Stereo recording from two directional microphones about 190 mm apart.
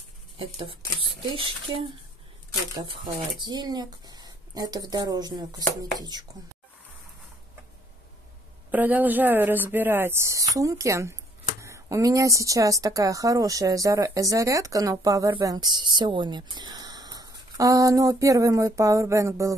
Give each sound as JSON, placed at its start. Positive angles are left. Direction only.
{"t": 0.4, "sound": "speech", "side_deg": -30}
{"t": 8.7, "sound": "a woman's voice", "side_deg": -10}